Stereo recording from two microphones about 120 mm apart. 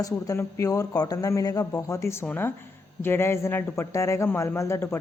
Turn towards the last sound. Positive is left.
turn(degrees=20)  # may be behind; listen again after turning